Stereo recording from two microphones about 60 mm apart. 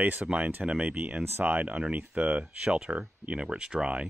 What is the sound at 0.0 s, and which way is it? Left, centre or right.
Speech, right.